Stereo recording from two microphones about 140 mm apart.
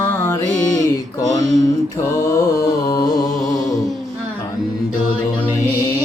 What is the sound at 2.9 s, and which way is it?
Singing, 25° left (ahead or behind).